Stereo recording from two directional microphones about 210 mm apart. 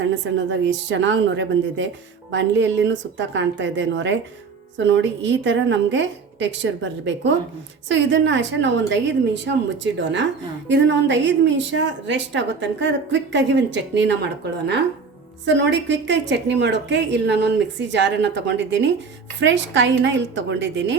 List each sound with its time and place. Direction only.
0.0 s speech: 60° right (ahead or behind)
15.4 s speech: 55° right (ahead or behind)